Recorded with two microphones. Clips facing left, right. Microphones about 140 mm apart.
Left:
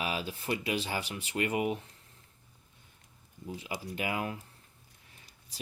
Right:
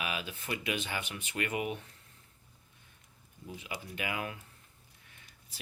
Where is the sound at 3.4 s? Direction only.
30° left (ahead or behind).